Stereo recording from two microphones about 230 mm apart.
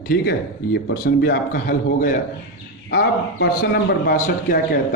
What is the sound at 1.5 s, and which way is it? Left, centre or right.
Speech, left.